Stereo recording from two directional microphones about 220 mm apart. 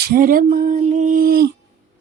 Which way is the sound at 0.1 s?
40° right (ahead or behind).